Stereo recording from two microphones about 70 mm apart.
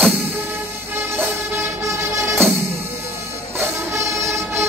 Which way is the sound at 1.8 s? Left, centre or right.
Right.